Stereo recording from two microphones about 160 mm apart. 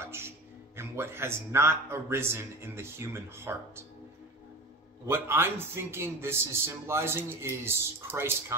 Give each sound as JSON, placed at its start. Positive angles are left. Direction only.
{"t": 0.0, "sound": "music", "side_deg": -15}
{"t": 0.7, "sound": "a man's voice", "side_deg": -15}
{"t": 5.0, "sound": "a man's voice", "side_deg": -15}